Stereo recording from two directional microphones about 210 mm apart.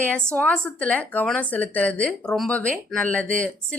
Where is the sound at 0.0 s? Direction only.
5° left (ahead or behind).